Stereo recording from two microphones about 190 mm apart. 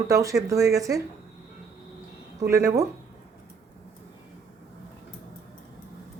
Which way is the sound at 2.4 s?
15° right (ahead or behind).